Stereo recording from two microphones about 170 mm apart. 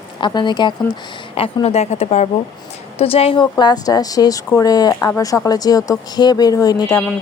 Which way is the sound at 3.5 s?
25° left (ahead or behind).